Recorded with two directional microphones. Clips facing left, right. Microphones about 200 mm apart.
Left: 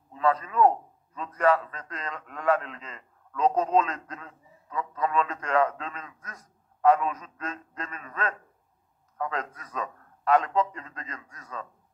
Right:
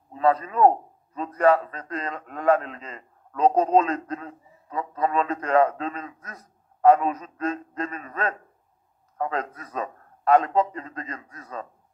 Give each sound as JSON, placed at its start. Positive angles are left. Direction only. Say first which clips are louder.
{"t": 0.1, "sound": "a man's voice", "louder": "right 4 dB", "side_deg": -35}